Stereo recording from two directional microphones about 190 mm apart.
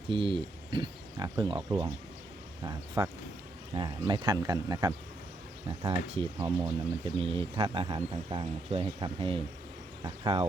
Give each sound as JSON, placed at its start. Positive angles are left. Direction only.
{"t": 0.1, "sound": "speech", "side_deg": -25}